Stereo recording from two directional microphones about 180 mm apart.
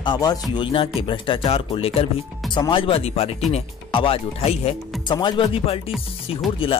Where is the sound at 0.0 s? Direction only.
20° left (ahead or behind).